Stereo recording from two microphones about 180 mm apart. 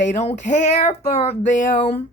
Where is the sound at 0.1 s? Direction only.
40° left (ahead or behind).